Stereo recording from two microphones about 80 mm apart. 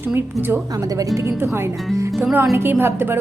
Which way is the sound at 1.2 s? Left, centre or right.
Right.